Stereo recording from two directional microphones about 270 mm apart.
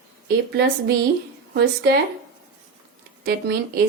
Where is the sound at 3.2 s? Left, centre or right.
Right.